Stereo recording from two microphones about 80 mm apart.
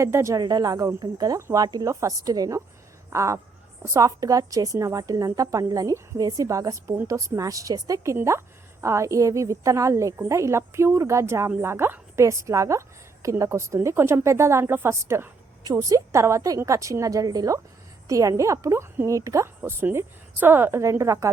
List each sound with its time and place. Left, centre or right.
0.0 s a woman's voice: right
0.3 s a woman's voice: right
3.1 s a woman's voice: right
15.6 s a woman's voice: right
19.6 s a woman's voice: right